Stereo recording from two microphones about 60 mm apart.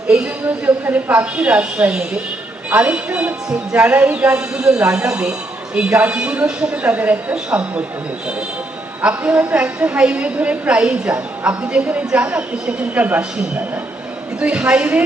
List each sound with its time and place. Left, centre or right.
0.4 s speech: right
1.1 s a woman's voice: centre
3.8 s a woman's voice: right
6.8 s a woman's voice: right
9.0 s a woman's voice: right
14.3 s a woman's voice: centre